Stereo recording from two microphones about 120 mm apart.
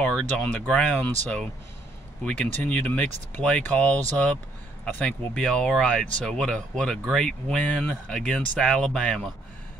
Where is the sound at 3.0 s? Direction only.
80° right.